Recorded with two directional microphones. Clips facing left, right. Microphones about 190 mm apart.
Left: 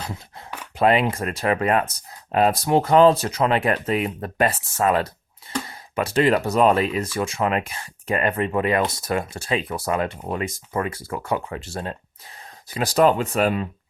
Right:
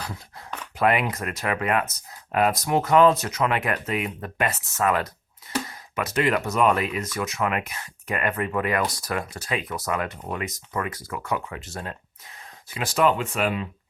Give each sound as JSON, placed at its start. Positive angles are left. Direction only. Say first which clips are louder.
{"t": 0.8, "sound": "speech", "louder": "left 4 dB", "side_deg": 25}